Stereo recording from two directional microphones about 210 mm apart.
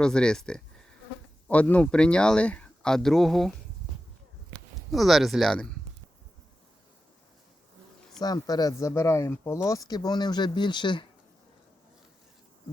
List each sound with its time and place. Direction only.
0.0 s speech: 5° left (ahead or behind)
4.9 s speech: centre (ahead or behind)
8.2 s speech: 20° left (ahead or behind)